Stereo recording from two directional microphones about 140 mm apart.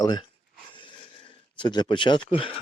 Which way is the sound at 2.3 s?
40° left (ahead or behind).